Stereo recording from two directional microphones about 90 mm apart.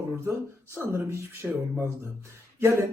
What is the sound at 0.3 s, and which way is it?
A man's voice, 25° right (ahead or behind).